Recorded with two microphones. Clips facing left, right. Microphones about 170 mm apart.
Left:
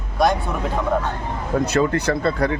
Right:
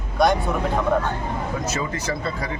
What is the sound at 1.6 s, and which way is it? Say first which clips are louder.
Speech: left 8 dB; 60° left (ahead or behind).